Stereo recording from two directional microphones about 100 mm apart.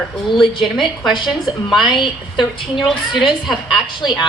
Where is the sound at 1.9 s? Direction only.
50° left (ahead or behind).